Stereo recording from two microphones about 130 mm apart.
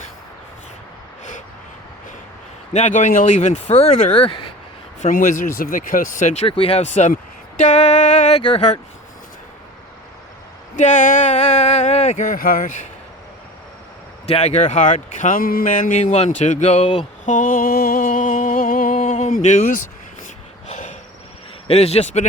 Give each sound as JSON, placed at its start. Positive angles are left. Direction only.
{"t": 2.7, "sound": "speech", "side_deg": 70}
{"t": 4.9, "sound": "speech", "side_deg": 80}
{"t": 6.5, "sound": "speech", "side_deg": 50}
{"t": 8.4, "sound": "speech", "side_deg": 40}
{"t": 10.8, "sound": "speech", "side_deg": 75}
{"t": 11.3, "sound": "speech", "side_deg": 50}
{"t": 14.3, "sound": "speech", "side_deg": 55}
{"t": 16.8, "sound": "a sound", "side_deg": 45}
{"t": 17.2, "sound": "a sound", "side_deg": 85}
{"t": 21.7, "sound": "speech", "side_deg": 55}